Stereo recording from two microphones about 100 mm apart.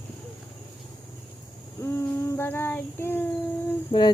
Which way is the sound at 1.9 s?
20° left (ahead or behind).